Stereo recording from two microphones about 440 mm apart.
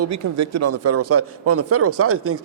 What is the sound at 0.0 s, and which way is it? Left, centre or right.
Speech, right.